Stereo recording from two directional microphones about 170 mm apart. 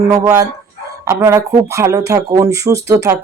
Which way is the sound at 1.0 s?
15° right (ahead or behind).